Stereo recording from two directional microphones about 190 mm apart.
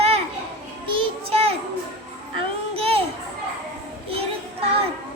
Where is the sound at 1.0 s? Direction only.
30° right (ahead or behind).